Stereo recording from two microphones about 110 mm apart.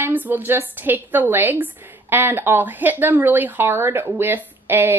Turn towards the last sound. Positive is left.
turn(degrees=-20)  # may be behind; listen again after turning